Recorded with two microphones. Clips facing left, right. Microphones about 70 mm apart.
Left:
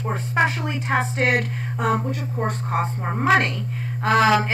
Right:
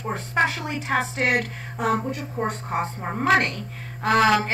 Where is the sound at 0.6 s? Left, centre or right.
Left.